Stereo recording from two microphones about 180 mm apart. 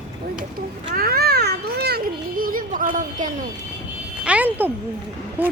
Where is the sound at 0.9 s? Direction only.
55° right (ahead or behind).